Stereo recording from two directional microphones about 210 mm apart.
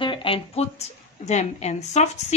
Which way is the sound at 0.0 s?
25° left (ahead or behind).